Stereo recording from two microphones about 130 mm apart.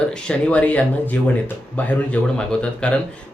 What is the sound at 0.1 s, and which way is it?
A man's voice, 10° left (ahead or behind).